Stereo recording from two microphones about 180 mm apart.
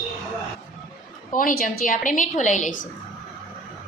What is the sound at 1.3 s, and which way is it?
A woman's voice, 50° left (ahead or behind).